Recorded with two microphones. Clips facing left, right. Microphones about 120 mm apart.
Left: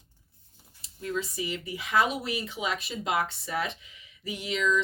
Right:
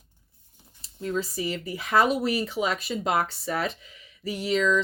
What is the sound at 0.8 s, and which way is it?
Speech, 35° right (ahead or behind).